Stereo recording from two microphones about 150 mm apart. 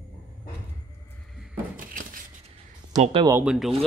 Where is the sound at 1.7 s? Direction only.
65° right (ahead or behind).